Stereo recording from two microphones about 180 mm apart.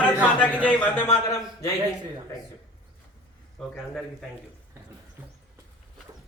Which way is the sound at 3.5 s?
Centre (ahead or behind).